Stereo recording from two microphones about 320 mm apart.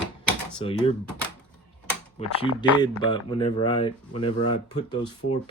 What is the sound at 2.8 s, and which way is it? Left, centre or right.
Speech, centre.